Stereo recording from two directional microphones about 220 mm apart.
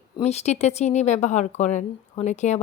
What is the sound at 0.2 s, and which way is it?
A woman's voice, 30° left (ahead or behind).